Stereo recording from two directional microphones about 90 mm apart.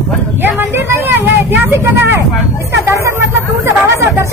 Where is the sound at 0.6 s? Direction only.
25° right (ahead or behind).